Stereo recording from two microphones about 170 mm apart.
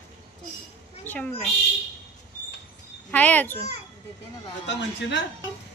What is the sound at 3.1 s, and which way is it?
Speech, 10° left (ahead or behind).